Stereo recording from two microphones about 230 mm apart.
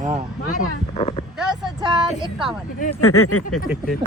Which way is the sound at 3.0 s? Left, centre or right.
Left.